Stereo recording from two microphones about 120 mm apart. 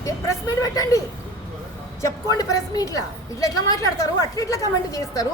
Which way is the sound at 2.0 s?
30° left (ahead or behind).